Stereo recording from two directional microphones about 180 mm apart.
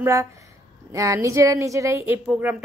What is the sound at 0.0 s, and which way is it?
Speech, 15° right (ahead or behind).